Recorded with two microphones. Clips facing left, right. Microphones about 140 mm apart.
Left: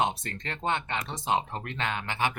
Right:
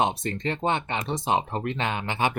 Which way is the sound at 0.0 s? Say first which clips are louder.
Right 4 dB; 20° right (ahead or behind).